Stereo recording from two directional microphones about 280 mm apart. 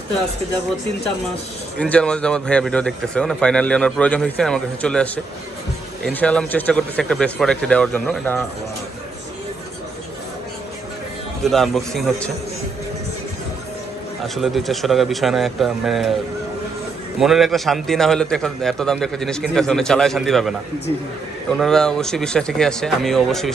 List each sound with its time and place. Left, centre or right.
1.8 s speech: centre
11.4 s speech: centre
14.3 s speech: centre
17.2 s speech: centre
21.6 s speech: centre